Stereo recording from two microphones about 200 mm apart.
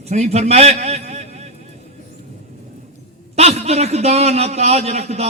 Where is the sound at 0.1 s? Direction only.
35° right (ahead or behind).